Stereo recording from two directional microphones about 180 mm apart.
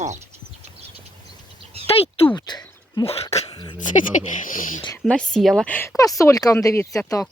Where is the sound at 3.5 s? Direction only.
25° left (ahead or behind).